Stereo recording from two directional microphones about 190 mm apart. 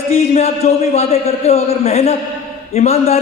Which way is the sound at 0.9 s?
35° left (ahead or behind).